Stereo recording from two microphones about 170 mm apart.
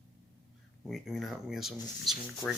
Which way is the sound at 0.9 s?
Centre (ahead or behind).